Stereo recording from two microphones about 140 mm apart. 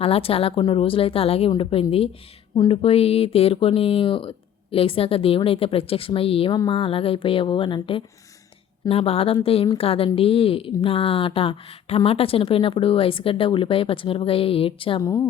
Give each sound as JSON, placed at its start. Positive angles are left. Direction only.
{"t": 0.0, "sound": "a woman's voice", "side_deg": 45}